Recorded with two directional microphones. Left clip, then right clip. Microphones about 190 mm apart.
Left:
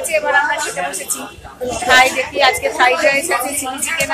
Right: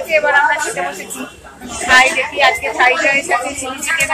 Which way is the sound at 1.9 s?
10° left (ahead or behind).